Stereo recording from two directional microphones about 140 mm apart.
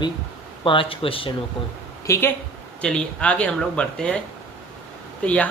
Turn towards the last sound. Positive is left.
turn(degrees=10)  # may be behind; listen again after turning